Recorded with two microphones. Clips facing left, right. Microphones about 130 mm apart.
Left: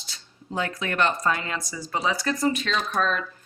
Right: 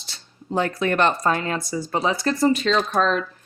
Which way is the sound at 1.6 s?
30° right (ahead or behind).